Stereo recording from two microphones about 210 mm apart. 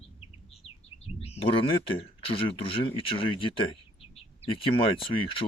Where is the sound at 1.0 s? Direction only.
30° left (ahead or behind).